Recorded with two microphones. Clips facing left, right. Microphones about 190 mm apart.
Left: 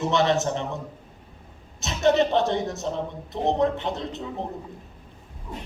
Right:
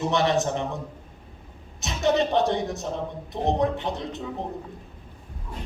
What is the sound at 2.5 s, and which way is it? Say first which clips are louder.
A man's voice: even; 20° left (ahead or behind).